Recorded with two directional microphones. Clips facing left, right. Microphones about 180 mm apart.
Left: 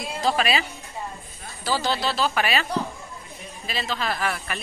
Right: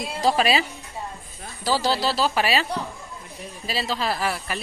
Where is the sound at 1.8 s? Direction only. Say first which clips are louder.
Right 2 dB; 35° right (ahead or behind).